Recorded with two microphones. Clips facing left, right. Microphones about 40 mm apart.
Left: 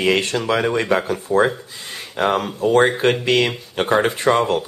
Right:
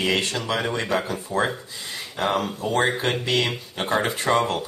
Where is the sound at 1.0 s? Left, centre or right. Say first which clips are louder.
Left 7 dB; left.